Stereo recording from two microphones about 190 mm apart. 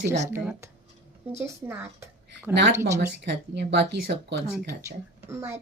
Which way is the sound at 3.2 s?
65° right (ahead or behind).